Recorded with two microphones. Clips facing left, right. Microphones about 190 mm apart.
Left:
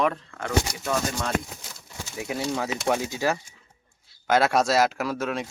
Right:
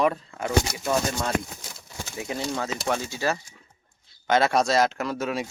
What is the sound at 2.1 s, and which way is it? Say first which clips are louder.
Speech: left 1 dB; 5° left (ahead or behind).